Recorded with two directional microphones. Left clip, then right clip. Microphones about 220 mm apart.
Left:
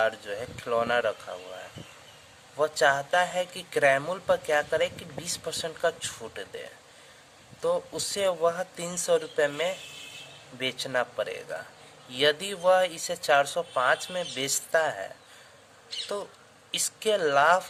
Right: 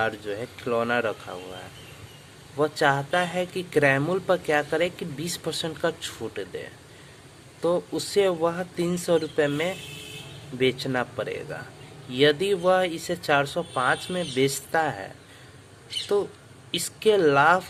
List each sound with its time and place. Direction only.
0.0 s speech: 25° left (ahead or behind)
2.6 s speech: 20° left (ahead or behind)
16.7 s speech: 25° left (ahead or behind)